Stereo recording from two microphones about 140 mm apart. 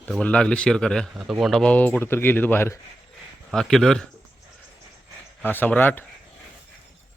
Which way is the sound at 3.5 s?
5° left (ahead or behind).